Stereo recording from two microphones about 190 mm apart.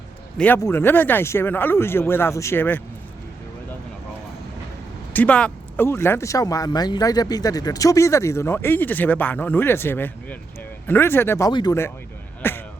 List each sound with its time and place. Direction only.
0.3 s speech: 10° left (ahead or behind)
5.1 s speech: 5° left (ahead or behind)
12.4 s a sound: 10° left (ahead or behind)